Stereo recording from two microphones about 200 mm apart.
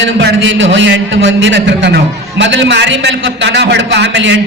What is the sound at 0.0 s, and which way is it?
A man's voice, 60° right (ahead or behind).